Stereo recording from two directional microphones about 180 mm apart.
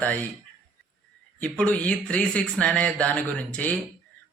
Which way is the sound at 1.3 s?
5° left (ahead or behind).